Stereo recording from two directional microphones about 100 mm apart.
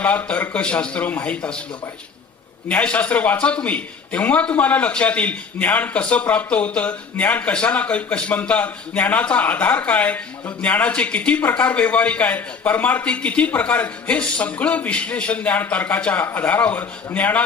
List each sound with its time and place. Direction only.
0.0 s a man's voice: 15° left (ahead or behind)
2.6 s a man's voice: 15° left (ahead or behind)